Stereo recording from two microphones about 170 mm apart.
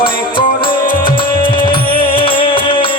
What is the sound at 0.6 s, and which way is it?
Music, 60° left (ahead or behind).